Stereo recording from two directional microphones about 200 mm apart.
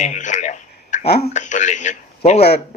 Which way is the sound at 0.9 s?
35° left (ahead or behind).